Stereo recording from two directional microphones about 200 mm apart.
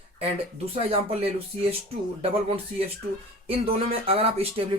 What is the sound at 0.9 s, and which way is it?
Speech, 30° right (ahead or behind).